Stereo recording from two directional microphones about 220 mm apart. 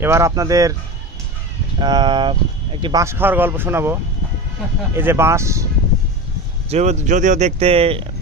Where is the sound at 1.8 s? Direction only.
20° right (ahead or behind).